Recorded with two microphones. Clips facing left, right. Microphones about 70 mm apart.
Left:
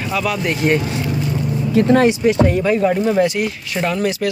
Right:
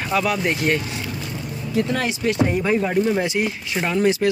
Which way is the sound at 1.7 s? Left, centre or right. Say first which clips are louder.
Left 8 dB; left.